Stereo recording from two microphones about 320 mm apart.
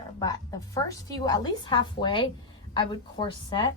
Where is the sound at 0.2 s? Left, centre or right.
Centre.